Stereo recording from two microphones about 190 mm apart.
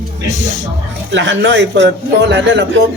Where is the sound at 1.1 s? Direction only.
70° right (ahead or behind).